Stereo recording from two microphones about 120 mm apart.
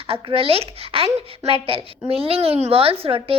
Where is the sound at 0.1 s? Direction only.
50° right (ahead or behind).